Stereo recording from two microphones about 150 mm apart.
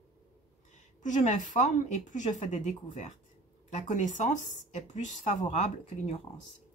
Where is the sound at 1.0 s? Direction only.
55° left (ahead or behind).